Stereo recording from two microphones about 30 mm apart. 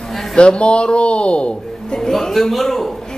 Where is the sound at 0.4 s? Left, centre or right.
Left.